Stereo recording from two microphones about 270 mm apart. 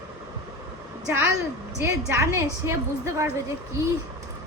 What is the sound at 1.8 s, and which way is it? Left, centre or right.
A woman's voice, centre.